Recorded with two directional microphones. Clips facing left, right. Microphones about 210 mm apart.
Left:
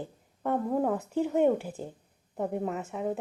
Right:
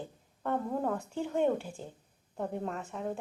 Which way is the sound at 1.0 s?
20° left (ahead or behind).